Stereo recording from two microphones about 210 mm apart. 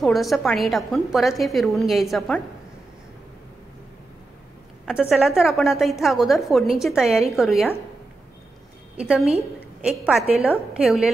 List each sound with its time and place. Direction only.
0.0 s a woman's voice: centre (ahead or behind)
5.1 s a woman's voice: centre (ahead or behind)
8.9 s a woman's voice: 5° right (ahead or behind)